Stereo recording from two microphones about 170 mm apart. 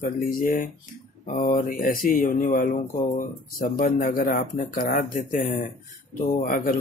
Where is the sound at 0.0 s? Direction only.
55° left (ahead or behind).